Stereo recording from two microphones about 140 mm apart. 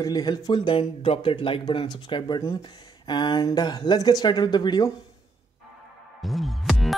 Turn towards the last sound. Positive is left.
turn(degrees=0)  # may be behind; listen again after turning